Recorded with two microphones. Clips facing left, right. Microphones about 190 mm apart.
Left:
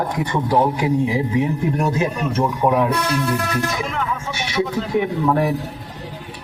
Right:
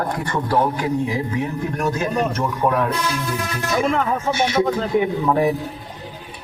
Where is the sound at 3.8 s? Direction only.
40° right (ahead or behind).